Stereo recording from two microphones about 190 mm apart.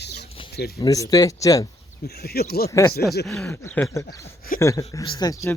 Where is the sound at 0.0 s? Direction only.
60° left (ahead or behind).